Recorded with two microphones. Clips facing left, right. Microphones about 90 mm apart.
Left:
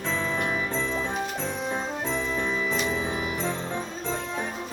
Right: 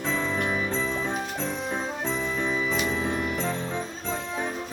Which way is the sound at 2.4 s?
Centre (ahead or behind).